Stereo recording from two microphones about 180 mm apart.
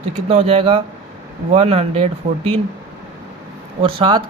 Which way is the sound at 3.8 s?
30° right (ahead or behind).